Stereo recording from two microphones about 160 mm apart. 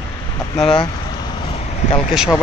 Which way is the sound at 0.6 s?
35° left (ahead or behind).